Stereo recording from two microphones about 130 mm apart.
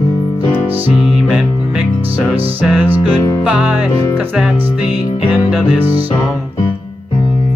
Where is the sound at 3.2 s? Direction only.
25° left (ahead or behind).